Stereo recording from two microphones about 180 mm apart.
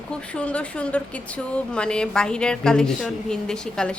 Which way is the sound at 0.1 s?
5° left (ahead or behind).